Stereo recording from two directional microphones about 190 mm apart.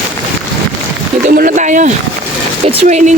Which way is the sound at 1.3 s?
45° right (ahead or behind).